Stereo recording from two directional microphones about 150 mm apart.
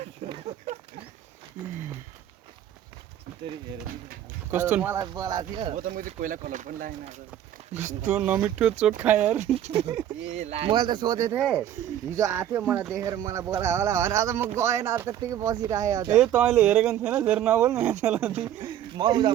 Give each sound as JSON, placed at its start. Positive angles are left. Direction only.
{"t": 0.2, "sound": "a sound", "side_deg": -50}
{"t": 4.5, "sound": "speech", "side_deg": -15}
{"t": 4.9, "sound": "speech", "side_deg": -25}
{"t": 5.7, "sound": "speech", "side_deg": -65}
{"t": 7.7, "sound": "speech", "side_deg": -50}
{"t": 8.1, "sound": "speech", "side_deg": -10}
{"t": 9.4, "sound": "speech", "side_deg": -45}
{"t": 11.3, "sound": "speech", "side_deg": -5}
{"t": 13.0, "sound": "speech", "side_deg": -20}
{"t": 16.2, "sound": "speech", "side_deg": -5}
{"t": 18.6, "sound": "speech", "side_deg": -30}